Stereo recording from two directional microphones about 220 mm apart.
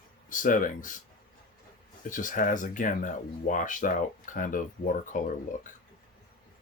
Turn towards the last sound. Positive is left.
turn(degrees=35)  # may be behind; listen again after turning